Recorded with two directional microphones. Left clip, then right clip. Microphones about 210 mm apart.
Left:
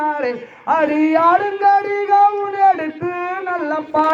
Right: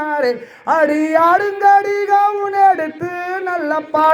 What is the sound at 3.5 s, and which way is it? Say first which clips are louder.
Child singing: right 2 dB; 55° right (ahead or behind).